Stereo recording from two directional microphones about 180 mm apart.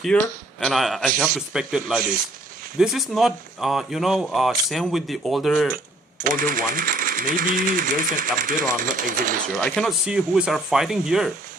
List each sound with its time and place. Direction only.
0.1 s speech: 5° left (ahead or behind)
6.2 s speech: 50° right (ahead or behind)
9.6 s speech: 5° left (ahead or behind)